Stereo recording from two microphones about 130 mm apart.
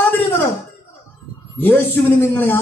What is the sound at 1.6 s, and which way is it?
Speech, 15° left (ahead or behind).